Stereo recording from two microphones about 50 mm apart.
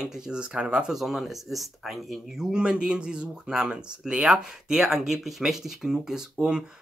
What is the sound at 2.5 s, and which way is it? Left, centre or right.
Speech, centre.